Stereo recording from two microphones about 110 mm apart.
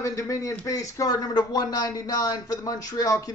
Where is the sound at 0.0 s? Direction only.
30° left (ahead or behind).